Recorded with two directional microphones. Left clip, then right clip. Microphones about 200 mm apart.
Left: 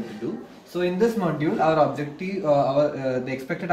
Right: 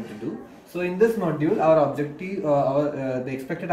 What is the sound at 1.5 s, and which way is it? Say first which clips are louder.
Speech: right 2 dB; 15° right (ahead or behind).